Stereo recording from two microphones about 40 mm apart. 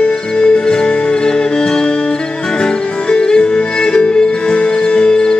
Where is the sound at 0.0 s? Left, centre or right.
Left.